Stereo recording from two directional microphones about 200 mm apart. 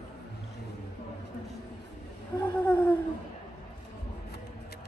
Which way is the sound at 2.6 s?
5° left (ahead or behind).